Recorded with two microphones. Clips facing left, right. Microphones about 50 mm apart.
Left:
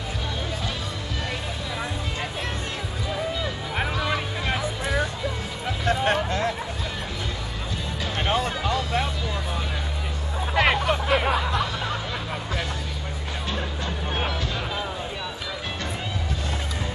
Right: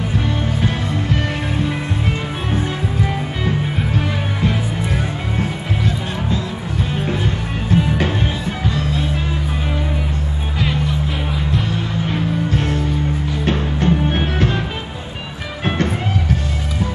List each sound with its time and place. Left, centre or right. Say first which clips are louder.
3.0 s music: right 5 dB; right
5.9 s music: left 4 dB; left
7.7 s music: right 19 dB; right
10.6 s music: even; left
12.1 s music: right 10 dB; right
15.6 s music: right 15 dB; right